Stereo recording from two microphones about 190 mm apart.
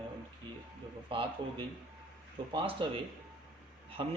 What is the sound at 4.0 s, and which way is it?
Speech, 30° right (ahead or behind).